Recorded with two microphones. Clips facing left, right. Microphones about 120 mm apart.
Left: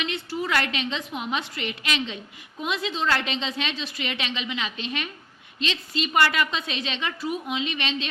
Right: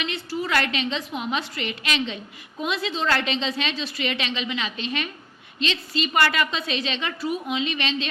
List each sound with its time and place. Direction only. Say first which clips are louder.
0.0 s a woman's voice: right 1 dB; 20° left (ahead or behind)